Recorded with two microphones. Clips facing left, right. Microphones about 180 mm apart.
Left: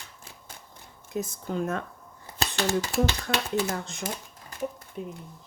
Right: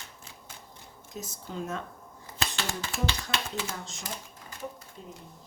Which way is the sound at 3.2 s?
55° left (ahead or behind).